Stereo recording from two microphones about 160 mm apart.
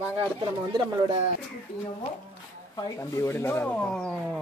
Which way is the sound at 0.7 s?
25° right (ahead or behind).